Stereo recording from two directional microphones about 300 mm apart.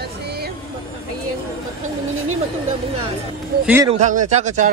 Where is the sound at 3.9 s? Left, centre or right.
Right.